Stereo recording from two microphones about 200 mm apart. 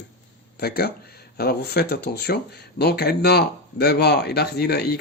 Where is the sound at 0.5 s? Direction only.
55° left (ahead or behind).